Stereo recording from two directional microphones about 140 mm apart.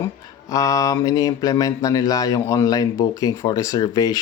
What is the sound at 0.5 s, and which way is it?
A man's voice, 25° left (ahead or behind).